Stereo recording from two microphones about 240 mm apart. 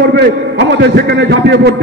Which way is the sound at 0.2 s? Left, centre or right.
Right.